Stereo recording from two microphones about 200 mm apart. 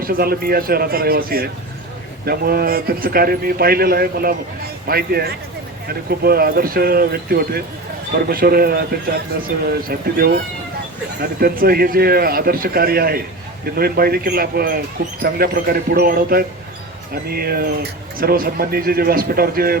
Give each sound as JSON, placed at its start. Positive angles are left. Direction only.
{"t": 0.0, "sound": "speech", "side_deg": -50}